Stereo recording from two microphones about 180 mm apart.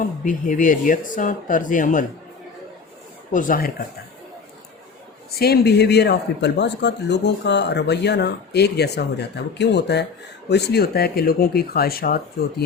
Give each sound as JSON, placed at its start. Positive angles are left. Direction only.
{"t": 0.3, "sound": "speech", "side_deg": 45}
{"t": 3.3, "sound": "speech", "side_deg": 50}
{"t": 5.3, "sound": "speech", "side_deg": 60}